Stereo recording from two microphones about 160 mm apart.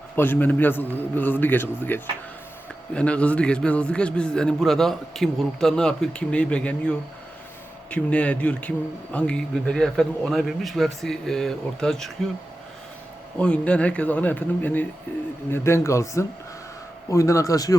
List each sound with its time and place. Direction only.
0.2 s a man's voice: 10° left (ahead or behind)
13.4 s a man's voice: 5° left (ahead or behind)